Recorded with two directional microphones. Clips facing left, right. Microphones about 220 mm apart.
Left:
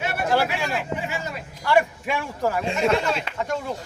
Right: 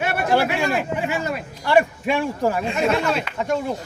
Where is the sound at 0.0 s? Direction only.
60° right (ahead or behind).